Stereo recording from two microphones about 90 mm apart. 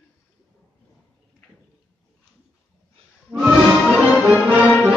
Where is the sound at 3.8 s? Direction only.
10° left (ahead or behind).